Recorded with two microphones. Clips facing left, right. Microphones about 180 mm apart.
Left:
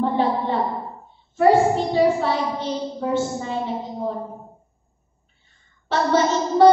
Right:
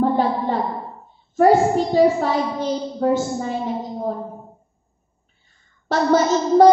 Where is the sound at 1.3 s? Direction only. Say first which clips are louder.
Right 1 dB; 40° right (ahead or behind).